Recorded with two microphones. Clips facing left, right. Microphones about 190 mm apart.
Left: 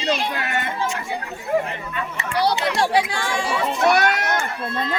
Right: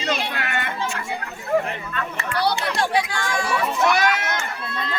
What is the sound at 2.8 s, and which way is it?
Speech, 30° left (ahead or behind).